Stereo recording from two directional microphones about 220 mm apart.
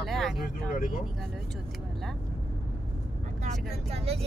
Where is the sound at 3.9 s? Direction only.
25° right (ahead or behind).